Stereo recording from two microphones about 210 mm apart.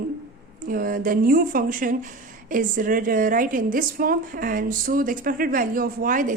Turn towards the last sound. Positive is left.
turn(degrees=-40)  # may be behind; listen again after turning